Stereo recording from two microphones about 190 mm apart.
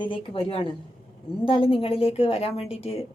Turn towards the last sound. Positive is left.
turn(degrees=30)  # may be behind; listen again after turning